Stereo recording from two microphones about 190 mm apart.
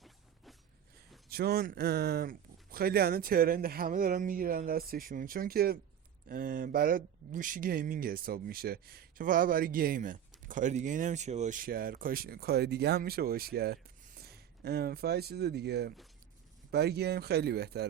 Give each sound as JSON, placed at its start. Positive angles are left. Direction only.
{"t": 1.3, "sound": "speech", "side_deg": -55}